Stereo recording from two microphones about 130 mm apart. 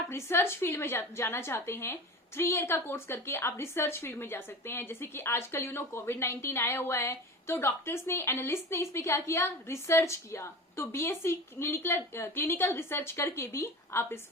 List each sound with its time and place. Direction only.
0.1 s a woman's voice: 20° left (ahead or behind)